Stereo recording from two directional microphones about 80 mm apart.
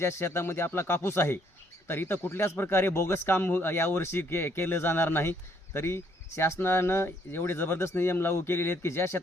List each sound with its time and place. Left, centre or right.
0.0 s a man's voice: left